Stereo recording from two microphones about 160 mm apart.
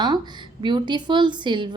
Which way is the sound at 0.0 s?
25° right (ahead or behind).